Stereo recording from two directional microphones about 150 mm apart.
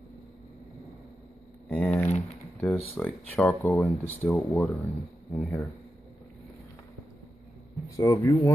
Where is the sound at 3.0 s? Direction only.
10° left (ahead or behind).